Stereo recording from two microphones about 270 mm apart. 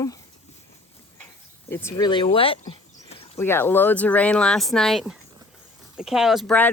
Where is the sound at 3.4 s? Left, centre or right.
Centre.